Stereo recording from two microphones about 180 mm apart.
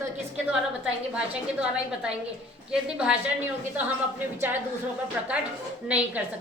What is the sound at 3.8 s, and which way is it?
Speech, 10° right (ahead or behind).